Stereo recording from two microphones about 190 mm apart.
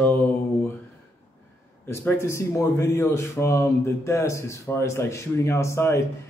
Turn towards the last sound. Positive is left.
turn(degrees=15)  # may be behind; listen again after turning